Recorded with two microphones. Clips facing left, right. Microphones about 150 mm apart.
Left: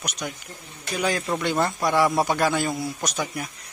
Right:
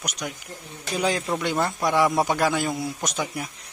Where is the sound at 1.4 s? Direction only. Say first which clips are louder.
Left 2 dB; 10° right (ahead or behind).